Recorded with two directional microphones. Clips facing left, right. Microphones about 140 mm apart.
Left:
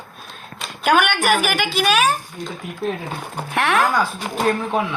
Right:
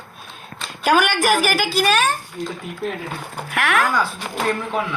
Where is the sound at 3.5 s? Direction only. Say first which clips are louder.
Left 2 dB; 25° left (ahead or behind).